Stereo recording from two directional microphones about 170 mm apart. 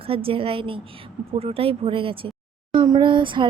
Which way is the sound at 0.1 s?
35° right (ahead or behind).